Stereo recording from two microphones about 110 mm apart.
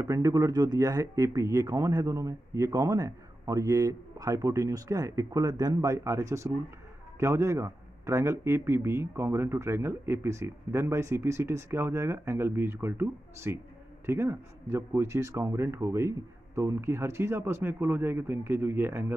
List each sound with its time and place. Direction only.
0.0 s a man's voice: 25° right (ahead or behind)